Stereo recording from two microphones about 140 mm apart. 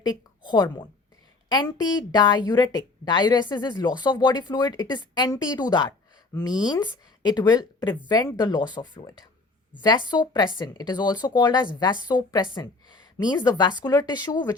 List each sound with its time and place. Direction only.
0.0 s a woman's voice: 30° left (ahead or behind)